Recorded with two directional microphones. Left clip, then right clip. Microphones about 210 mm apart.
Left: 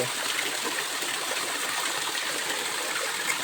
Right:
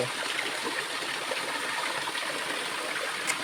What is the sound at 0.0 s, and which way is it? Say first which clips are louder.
Stream: left 2 dB; 55° left (ahead or behind).